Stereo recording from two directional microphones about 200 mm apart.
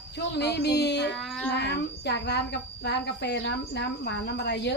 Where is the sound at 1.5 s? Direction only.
55° left (ahead or behind).